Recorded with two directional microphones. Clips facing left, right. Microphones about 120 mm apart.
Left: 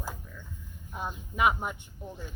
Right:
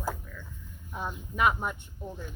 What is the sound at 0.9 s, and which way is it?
Speech, 10° left (ahead or behind).